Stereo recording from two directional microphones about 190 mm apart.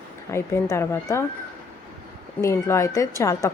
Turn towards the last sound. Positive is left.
turn(degrees=15)  # may be behind; listen again after turning